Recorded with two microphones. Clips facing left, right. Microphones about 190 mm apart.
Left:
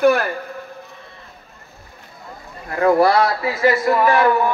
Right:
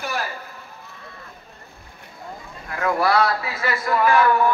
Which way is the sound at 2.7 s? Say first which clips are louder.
Left 6 dB; 30° left (ahead or behind).